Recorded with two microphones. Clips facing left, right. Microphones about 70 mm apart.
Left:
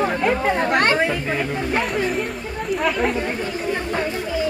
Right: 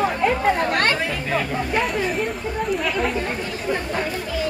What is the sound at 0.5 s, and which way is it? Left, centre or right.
Speech, left.